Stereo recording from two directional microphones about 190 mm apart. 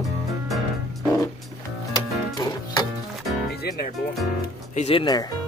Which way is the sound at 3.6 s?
55° left (ahead or behind).